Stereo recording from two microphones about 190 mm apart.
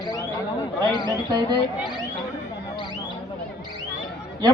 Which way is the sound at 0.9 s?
20° right (ahead or behind).